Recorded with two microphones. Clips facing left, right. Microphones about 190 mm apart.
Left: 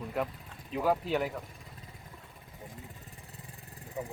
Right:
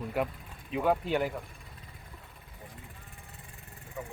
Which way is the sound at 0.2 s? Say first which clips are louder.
Right 2 dB; 5° right (ahead or behind).